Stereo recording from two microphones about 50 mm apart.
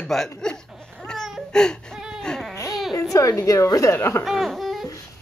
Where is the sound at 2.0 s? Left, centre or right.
Centre.